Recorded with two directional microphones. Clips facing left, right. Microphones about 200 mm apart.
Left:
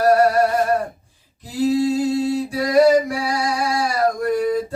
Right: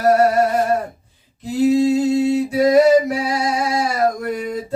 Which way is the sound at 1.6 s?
20° right (ahead or behind).